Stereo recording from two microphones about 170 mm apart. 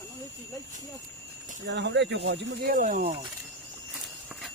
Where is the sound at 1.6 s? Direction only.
85° right; by 3.2 s 45° right (ahead or behind).